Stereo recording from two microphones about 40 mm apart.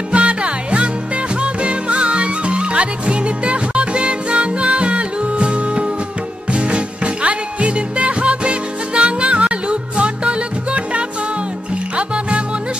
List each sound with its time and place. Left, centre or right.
0.1 s music: right